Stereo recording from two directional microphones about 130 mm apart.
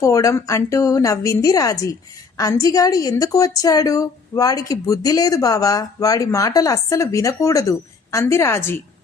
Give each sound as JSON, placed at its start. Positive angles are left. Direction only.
{"t": 0.0, "sound": "a woman's voice", "side_deg": 25}